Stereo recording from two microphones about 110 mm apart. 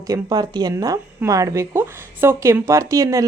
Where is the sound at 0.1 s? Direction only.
35° right (ahead or behind).